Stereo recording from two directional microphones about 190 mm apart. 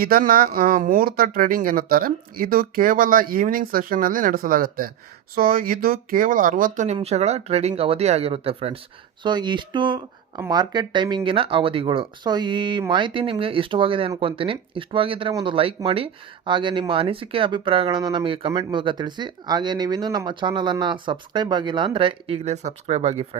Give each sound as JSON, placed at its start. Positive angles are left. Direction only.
{"t": 0.0, "sound": "speech", "side_deg": -50}